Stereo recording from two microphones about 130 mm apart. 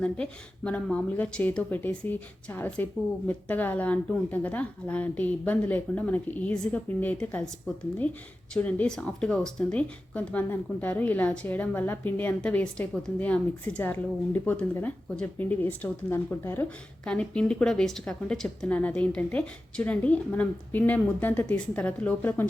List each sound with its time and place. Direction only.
0.0 s speech: 10° left (ahead or behind)
8.5 s speech: 10° left (ahead or behind)
17.1 s speech: 5° left (ahead or behind)